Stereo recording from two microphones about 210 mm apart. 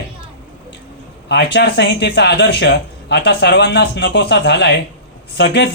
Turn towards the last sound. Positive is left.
turn(degrees=55)  # may be behind; listen again after turning